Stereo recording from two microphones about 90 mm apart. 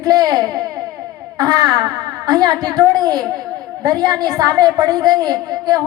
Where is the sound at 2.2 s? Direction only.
45° right (ahead or behind).